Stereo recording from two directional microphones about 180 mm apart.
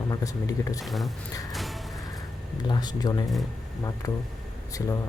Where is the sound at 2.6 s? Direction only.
25° left (ahead or behind).